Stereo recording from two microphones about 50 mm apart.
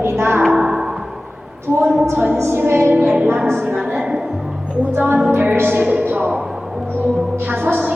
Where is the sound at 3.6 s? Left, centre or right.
Right.